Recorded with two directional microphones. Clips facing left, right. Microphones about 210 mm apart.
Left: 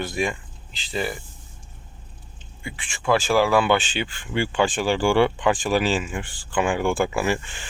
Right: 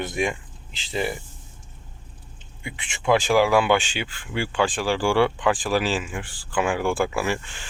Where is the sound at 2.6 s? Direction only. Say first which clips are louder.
Right 1 dB; 20° right (ahead or behind).